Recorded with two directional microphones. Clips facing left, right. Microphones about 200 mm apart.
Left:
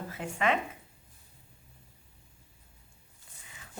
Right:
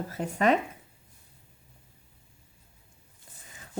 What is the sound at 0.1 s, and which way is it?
Speech, 40° right (ahead or behind).